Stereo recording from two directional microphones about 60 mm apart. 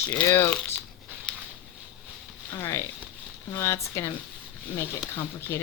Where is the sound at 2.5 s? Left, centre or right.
Left.